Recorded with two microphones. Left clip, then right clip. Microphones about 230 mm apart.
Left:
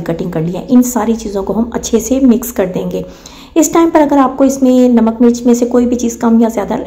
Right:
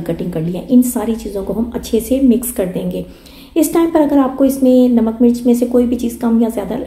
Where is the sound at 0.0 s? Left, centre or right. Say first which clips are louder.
Left 3 dB; centre.